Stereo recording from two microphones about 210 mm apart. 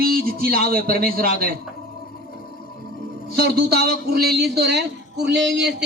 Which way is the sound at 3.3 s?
50° right (ahead or behind).